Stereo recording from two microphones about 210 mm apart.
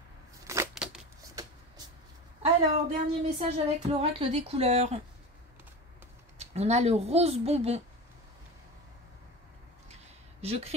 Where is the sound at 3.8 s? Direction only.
30° right (ahead or behind).